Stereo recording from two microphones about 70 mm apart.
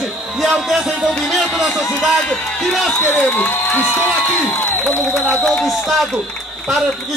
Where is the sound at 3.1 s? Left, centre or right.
Centre.